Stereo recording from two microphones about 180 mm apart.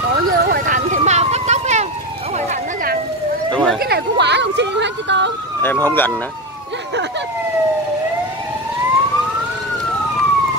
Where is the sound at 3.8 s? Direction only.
70° right (ahead or behind).